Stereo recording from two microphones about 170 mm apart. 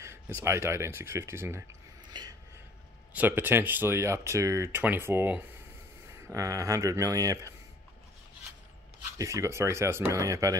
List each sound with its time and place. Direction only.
0.4 s speech: 15° right (ahead or behind)
2.0 s a sound: 25° right (ahead or behind)
3.1 s speech: 10° right (ahead or behind)
9.2 s speech: 15° right (ahead or behind)